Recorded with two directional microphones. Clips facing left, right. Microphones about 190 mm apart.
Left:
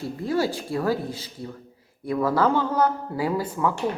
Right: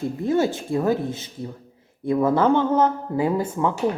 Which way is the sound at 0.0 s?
20° right (ahead or behind).